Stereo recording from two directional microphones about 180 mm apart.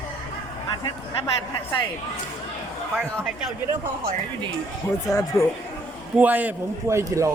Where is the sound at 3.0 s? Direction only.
5° right (ahead or behind).